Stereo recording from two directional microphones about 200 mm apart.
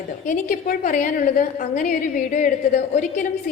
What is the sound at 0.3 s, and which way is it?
A woman's voice, 40° left (ahead or behind).